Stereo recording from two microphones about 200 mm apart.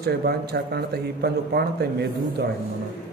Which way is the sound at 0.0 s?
50° right (ahead or behind).